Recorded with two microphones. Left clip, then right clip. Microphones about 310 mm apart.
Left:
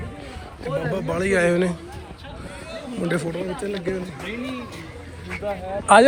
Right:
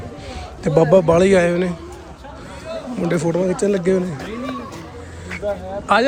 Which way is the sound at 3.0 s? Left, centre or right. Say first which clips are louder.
Right 5 dB; centre.